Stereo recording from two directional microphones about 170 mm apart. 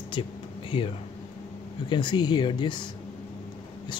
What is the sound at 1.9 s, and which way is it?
Speech, 25° left (ahead or behind).